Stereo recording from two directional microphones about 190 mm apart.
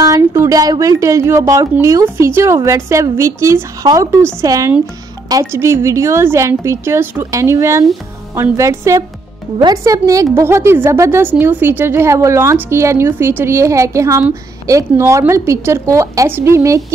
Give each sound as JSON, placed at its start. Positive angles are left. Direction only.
{"t": 0.0, "sound": "a woman's voice", "side_deg": -15}